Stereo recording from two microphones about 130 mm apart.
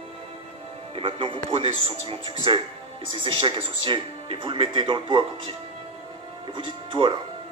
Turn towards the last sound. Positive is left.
turn(degrees=-40)  # may be behind; listen again after turning